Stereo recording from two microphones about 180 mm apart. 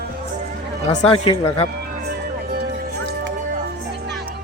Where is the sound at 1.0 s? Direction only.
35° left (ahead or behind).